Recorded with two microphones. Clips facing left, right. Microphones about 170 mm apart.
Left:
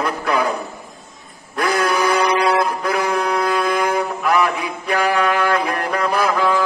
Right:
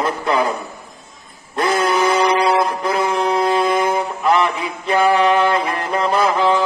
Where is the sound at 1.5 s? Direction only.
25° right (ahead or behind).